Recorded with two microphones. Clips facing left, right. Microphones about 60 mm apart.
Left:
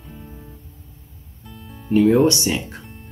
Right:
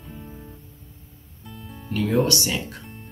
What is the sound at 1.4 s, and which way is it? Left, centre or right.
Music, centre.